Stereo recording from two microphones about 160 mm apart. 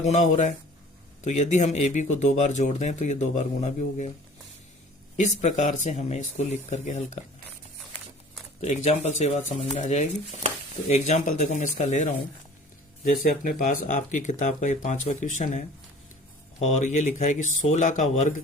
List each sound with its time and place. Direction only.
0.0 s speech: 45° left (ahead or behind)
5.1 s speech: 50° left (ahead or behind)
8.6 s speech: 45° left (ahead or behind)
13.4 s speech: 55° left (ahead or behind)